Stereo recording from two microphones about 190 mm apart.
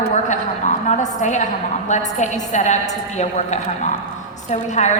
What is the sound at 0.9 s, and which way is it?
A woman's voice, 40° left (ahead or behind).